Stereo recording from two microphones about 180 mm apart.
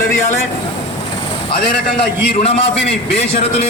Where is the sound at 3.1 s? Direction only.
35° left (ahead or behind).